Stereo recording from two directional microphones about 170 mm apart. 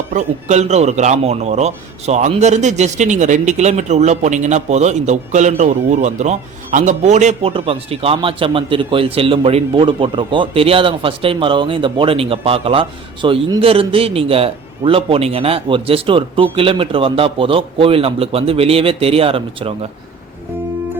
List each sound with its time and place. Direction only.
0.1 s a man's voice: 45° right (ahead or behind)